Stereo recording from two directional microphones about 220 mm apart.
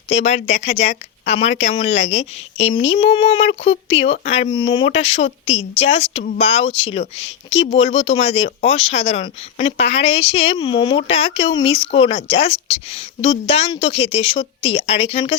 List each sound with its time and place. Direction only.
0.1 s speech: 30° left (ahead or behind)